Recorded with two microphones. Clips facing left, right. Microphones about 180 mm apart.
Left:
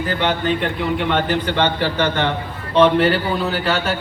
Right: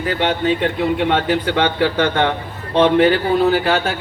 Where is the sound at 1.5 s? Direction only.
55° right (ahead or behind).